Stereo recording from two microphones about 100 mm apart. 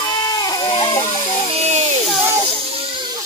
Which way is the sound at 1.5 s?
90° right.